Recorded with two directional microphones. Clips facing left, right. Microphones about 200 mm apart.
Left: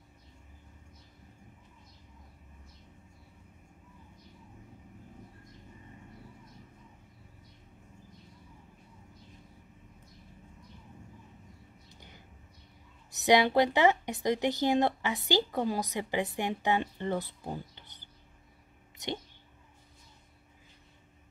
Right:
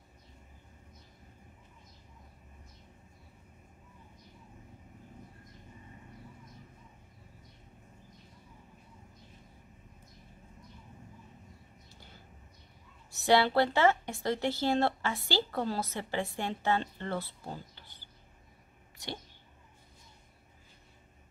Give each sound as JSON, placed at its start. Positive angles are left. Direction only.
{"t": 11.9, "sound": "vehicle", "side_deg": 15}
{"t": 13.1, "sound": "a woman's voice", "side_deg": 20}